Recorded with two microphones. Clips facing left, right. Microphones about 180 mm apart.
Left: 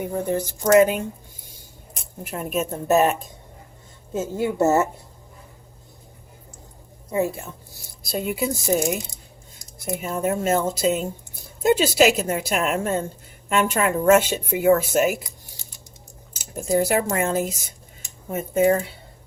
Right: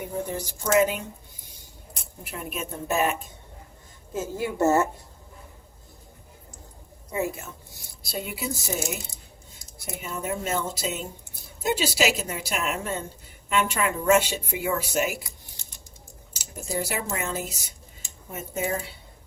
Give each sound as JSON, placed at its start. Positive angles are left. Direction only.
{"t": 0.1, "sound": "speech", "side_deg": 55}
{"t": 2.2, "sound": "speech", "side_deg": 45}
{"t": 4.1, "sound": "a woman's voice", "side_deg": 25}
{"t": 7.1, "sound": "a woman's voice", "side_deg": 30}
{"t": 8.1, "sound": "speech", "side_deg": 50}
{"t": 10.0, "sound": "speech", "side_deg": 50}
{"t": 16.3, "sound": "speech", "side_deg": 50}